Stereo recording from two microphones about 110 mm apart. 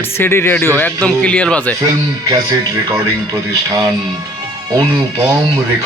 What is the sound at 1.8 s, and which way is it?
Speech, 35° right (ahead or behind).